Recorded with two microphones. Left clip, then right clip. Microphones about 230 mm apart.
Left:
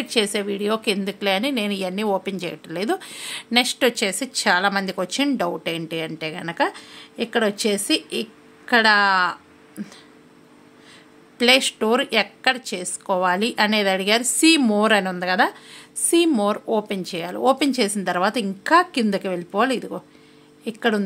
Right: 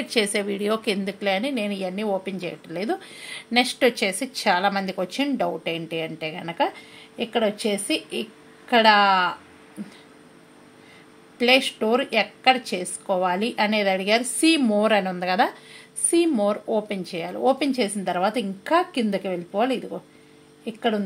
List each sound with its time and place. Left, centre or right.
0.0 s a woman's voice: centre
11.3 s a woman's voice: left